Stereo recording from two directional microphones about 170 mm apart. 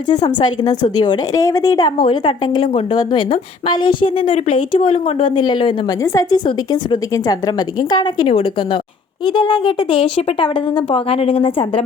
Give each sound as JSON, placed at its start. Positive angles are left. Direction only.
{"t": 0.1, "sound": "a woman's voice", "side_deg": 25}